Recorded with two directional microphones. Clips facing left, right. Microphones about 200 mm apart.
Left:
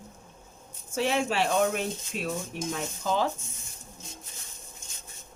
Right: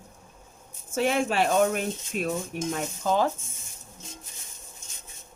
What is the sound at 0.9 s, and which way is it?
A woman's voice, 50° right (ahead or behind).